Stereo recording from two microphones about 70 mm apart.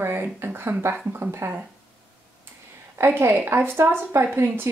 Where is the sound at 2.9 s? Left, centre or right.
Right.